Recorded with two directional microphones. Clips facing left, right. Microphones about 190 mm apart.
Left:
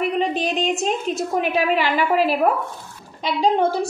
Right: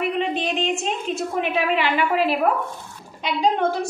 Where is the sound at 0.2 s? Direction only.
40° left (ahead or behind).